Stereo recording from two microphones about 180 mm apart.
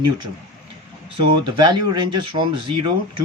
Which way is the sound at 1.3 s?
25° right (ahead or behind).